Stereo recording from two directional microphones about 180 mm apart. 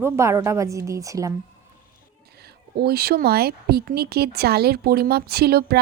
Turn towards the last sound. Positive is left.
turn(degrees=-60)  # may be behind; listen again after turning